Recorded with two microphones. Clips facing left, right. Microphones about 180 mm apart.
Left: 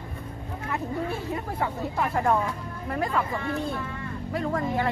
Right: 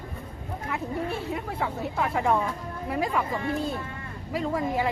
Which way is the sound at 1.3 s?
Centre (ahead or behind).